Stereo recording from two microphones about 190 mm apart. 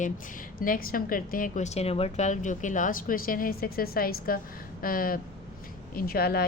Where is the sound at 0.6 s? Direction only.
50° left (ahead or behind).